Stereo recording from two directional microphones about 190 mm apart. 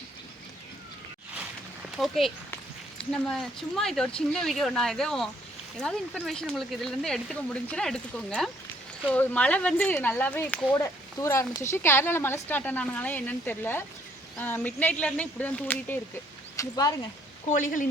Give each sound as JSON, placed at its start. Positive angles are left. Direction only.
{"t": 2.0, "sound": "a woman's voice", "side_deg": 0}
{"t": 16.6, "sound": "speech", "side_deg": 20}
{"t": 17.5, "sound": "speech", "side_deg": 45}